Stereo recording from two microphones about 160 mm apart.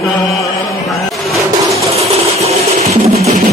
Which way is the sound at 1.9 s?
40° right (ahead or behind).